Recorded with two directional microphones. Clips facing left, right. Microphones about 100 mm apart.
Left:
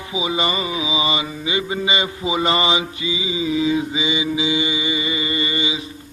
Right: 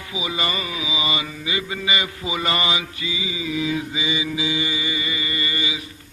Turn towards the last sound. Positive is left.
turn(degrees=20)  # may be behind; listen again after turning